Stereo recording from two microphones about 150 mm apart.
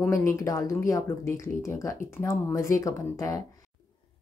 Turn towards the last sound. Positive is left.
turn(degrees=20)  # may be behind; listen again after turning